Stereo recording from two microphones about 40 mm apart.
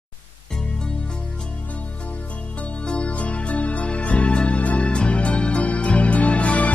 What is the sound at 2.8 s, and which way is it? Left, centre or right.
Music, left.